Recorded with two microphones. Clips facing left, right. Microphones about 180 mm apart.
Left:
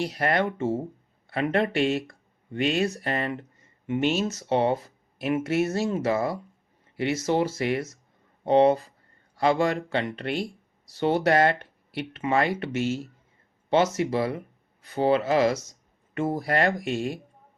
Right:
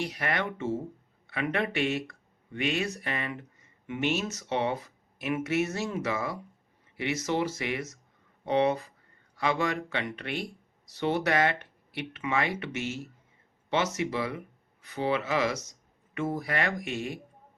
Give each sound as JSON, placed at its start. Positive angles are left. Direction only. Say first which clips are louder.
{"t": 0.0, "sound": "speech", "louder": "left 6 dB", "side_deg": 35}